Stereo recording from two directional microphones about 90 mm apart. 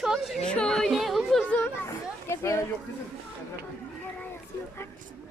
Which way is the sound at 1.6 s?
30° left (ahead or behind).